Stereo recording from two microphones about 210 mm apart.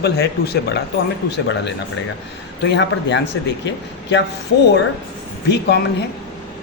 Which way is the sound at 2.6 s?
55° left (ahead or behind).